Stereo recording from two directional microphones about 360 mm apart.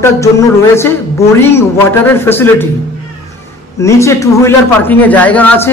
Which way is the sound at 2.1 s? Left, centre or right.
Centre.